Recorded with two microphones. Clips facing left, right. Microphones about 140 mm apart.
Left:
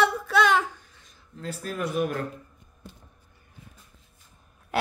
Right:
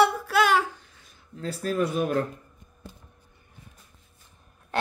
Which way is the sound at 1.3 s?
40° right (ahead or behind).